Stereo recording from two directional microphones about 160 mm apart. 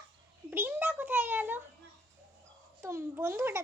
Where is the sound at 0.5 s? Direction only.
10° right (ahead or behind).